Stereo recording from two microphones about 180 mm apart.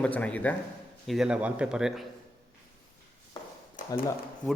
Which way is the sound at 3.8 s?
45° left (ahead or behind).